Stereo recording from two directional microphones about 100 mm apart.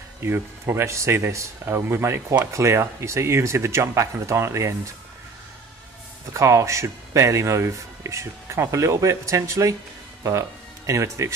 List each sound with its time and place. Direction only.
0.2 s speech: 25° right (ahead or behind)
6.3 s speech: 30° right (ahead or behind)
10.9 s speech: 30° right (ahead or behind)